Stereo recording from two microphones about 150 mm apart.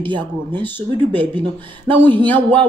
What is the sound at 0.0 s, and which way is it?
Music, 30° right (ahead or behind).